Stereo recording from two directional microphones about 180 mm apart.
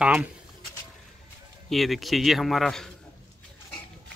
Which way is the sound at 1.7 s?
Centre (ahead or behind).